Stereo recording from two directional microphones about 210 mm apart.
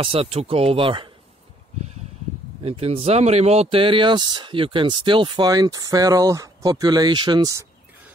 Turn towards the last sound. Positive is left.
turn(degrees=-20)  # may be behind; listen again after turning